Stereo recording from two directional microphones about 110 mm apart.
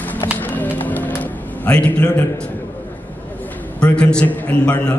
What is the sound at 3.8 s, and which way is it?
A man's voice, 10° left (ahead or behind).